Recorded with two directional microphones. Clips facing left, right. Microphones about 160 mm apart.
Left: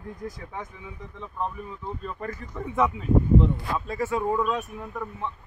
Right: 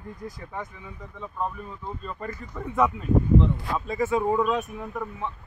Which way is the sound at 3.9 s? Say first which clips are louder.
Right 3 dB; 10° right (ahead or behind).